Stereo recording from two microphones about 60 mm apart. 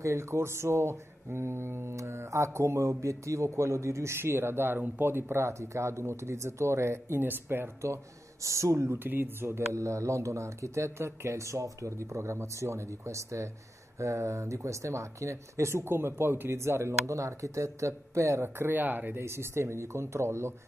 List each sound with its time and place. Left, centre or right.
0.0 s speech: right
4.7 s speech: right
5.0 s speech: right
7.2 s speech: right
9.0 s speech: right
9.8 s speech: right
19.1 s speech: right